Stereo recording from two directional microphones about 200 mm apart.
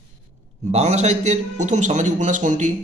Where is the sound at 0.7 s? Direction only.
35° right (ahead or behind).